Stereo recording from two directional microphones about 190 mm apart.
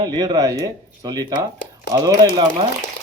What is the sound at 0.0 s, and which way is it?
Speech, 20° right (ahead or behind).